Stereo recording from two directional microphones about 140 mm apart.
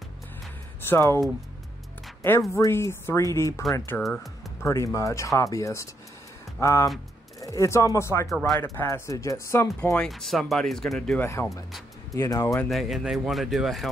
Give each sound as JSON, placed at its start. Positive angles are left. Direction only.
{"t": 0.8, "sound": "speech", "side_deg": 15}
{"t": 2.5, "sound": "speech", "side_deg": 20}
{"t": 4.0, "sound": "speech", "side_deg": 0}
{"t": 4.6, "sound": "speech", "side_deg": 20}
{"t": 9.9, "sound": "speech", "side_deg": 0}
{"t": 12.1, "sound": "speech", "side_deg": 20}
{"t": 12.6, "sound": "speech", "side_deg": 0}